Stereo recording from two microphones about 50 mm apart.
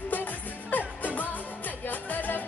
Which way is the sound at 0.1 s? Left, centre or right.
Left.